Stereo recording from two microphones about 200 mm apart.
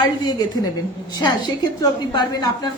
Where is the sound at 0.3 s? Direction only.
20° left (ahead or behind).